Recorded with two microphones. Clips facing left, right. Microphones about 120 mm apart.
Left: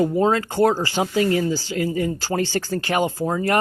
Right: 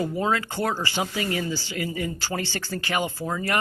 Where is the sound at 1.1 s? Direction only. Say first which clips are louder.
Left 8 dB; 40° left (ahead or behind).